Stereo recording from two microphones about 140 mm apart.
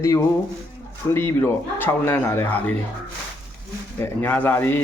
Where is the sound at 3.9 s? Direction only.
15° left (ahead or behind).